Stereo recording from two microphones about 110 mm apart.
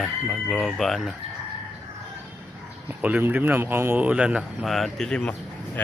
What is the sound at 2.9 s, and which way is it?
Speech, 15° right (ahead or behind).